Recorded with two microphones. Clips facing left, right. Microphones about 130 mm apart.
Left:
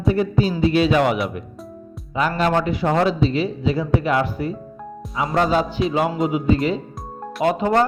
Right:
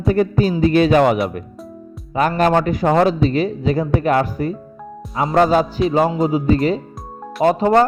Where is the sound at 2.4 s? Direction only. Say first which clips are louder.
Right 4 dB; 45° right (ahead or behind).